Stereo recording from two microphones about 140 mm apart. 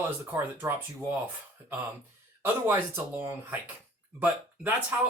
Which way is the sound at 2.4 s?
15° right (ahead or behind).